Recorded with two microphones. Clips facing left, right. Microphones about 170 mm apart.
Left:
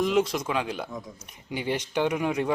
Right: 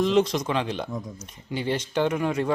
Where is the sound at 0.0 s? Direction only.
5° left (ahead or behind).